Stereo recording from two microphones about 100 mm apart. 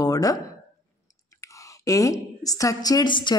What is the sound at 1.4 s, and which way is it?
A woman's voice, 35° left (ahead or behind).